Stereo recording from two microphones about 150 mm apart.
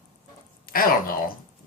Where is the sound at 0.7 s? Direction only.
75° left (ahead or behind).